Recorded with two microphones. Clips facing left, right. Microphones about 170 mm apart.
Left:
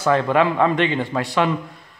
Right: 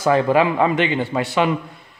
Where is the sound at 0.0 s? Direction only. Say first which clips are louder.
Right 2 dB; 10° right (ahead or behind).